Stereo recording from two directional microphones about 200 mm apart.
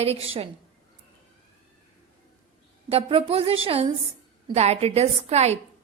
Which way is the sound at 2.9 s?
30° right (ahead or behind).